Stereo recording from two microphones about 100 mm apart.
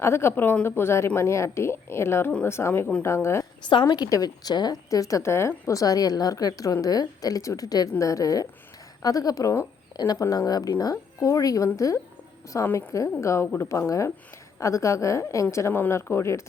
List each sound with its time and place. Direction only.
0.0 s a woman's voice: 25° left (ahead or behind)
3.7 s a woman's voice: 50° left (ahead or behind)
12.6 s a woman's voice: 20° left (ahead or behind)
12.9 s a woman's voice: 30° left (ahead or behind)